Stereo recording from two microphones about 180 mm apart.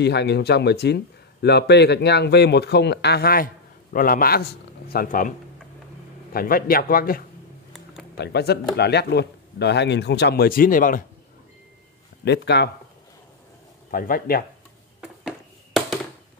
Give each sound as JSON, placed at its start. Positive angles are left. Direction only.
{"t": 0.0, "sound": "a man's voice", "side_deg": 70}
{"t": 6.3, "sound": "a man's voice", "side_deg": 55}
{"t": 7.7, "sound": "a sound", "side_deg": 0}
{"t": 8.2, "sound": "speech", "side_deg": 65}
{"t": 12.3, "sound": "speech", "side_deg": 70}
{"t": 13.8, "sound": "a man's voice", "side_deg": 50}
{"t": 15.0, "sound": "a sound", "side_deg": -5}